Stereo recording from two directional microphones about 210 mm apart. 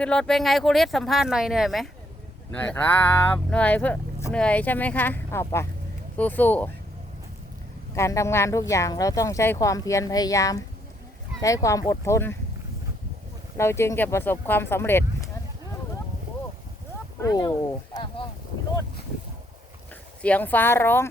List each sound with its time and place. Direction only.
0.0 s speech: 5° left (ahead or behind)
7.9 s speech: 15° left (ahead or behind)
13.6 s speech: 10° left (ahead or behind)
17.2 s speech: 20° left (ahead or behind)
20.2 s speech: 5° left (ahead or behind)